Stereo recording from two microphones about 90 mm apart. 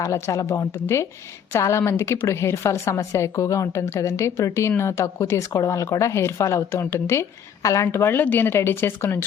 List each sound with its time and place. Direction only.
0.0 s a woman's voice: 35° left (ahead or behind)